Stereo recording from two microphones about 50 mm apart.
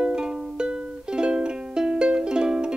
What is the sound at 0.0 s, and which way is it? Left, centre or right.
Music, centre.